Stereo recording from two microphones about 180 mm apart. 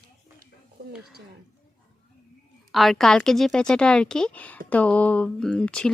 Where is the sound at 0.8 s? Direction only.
65° right (ahead or behind).